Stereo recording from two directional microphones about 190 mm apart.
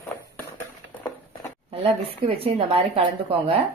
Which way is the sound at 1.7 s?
30° right (ahead or behind).